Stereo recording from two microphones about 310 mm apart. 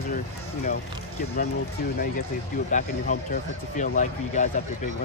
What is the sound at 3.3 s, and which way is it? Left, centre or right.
Speech, left.